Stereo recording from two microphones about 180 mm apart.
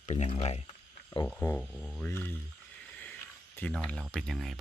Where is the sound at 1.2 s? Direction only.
10° left (ahead or behind).